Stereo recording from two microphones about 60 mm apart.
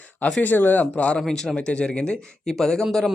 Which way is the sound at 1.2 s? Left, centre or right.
Centre.